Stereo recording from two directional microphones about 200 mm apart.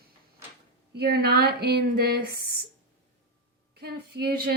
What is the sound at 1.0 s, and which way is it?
Speech, 50° right (ahead or behind).